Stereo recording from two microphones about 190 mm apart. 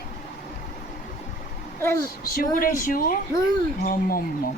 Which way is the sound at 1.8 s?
15° left (ahead or behind).